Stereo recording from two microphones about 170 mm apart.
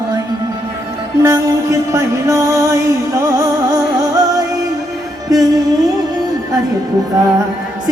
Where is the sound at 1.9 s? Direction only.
20° right (ahead or behind).